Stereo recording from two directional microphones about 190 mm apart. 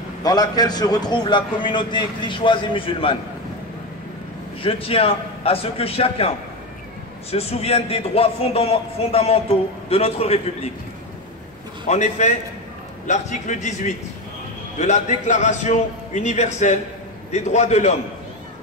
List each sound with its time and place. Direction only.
0.2 s a man's voice: 20° left (ahead or behind)
4.6 s a man's voice: 30° left (ahead or behind)
11.9 s a man's voice: 35° left (ahead or behind)